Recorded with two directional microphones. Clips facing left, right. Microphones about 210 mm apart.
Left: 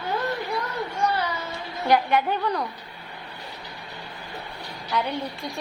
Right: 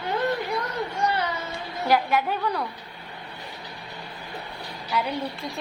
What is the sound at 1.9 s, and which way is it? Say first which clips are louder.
Speech: left 2 dB; 5° right (ahead or behind).